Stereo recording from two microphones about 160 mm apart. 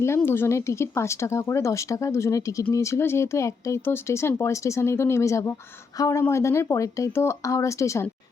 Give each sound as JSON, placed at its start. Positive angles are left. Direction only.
{"t": 0.0, "sound": "speech", "side_deg": 15}